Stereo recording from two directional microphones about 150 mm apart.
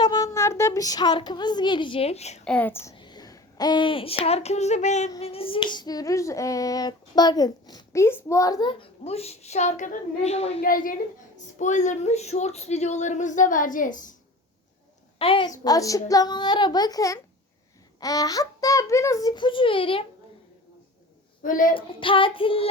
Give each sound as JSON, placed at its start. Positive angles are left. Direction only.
{"t": 0.0, "sound": "speech", "side_deg": 25}
{"t": 2.4, "sound": "speech", "side_deg": 10}
{"t": 2.9, "sound": "speech", "side_deg": 30}
{"t": 5.2, "sound": "finger snapping", "side_deg": 40}
{"t": 8.8, "sound": "speech", "side_deg": 45}
{"t": 10.6, "sound": "a woman's voice", "side_deg": 70}
{"t": 11.6, "sound": "speech", "side_deg": 55}
{"t": 15.2, "sound": "child singing", "side_deg": 35}
{"t": 15.6, "sound": "finger snapping", "side_deg": 25}
{"t": 21.4, "sound": "a woman's voice", "side_deg": 65}
{"t": 21.8, "sound": "child singing", "side_deg": 35}